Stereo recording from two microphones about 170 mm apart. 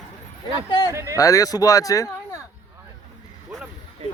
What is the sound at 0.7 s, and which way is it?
Speech, 25° left (ahead or behind).